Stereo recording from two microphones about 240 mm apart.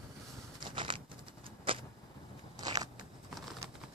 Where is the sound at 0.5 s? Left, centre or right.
Centre.